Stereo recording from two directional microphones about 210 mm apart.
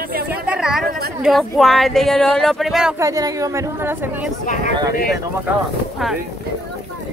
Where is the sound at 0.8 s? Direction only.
45° right (ahead or behind).